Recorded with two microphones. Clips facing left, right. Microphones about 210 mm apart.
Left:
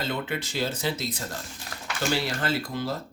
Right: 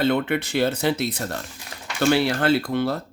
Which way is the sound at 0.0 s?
65° right (ahead or behind).